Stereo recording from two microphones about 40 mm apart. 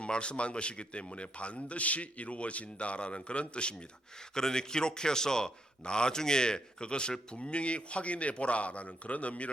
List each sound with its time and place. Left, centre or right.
0.0 s a man's voice: left